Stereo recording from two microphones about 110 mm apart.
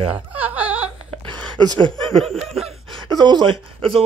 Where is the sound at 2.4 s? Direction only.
65° right (ahead or behind).